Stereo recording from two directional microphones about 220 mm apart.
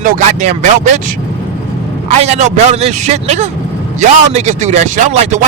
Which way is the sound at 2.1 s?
30° right (ahead or behind).